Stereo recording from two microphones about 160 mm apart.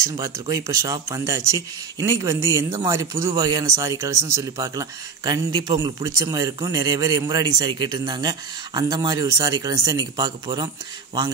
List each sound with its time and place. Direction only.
0.0 s speech: 20° right (ahead or behind)